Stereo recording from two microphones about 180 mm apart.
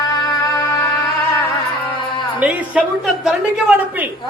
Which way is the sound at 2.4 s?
5° right (ahead or behind).